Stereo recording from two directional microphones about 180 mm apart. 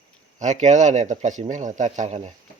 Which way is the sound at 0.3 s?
40° right (ahead or behind).